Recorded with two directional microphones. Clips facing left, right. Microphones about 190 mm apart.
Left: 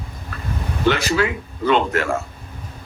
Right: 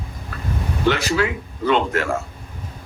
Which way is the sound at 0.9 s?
70° left (ahead or behind).